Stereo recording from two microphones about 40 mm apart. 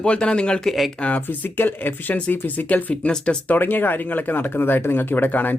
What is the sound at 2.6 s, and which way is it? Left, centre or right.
Speech, left.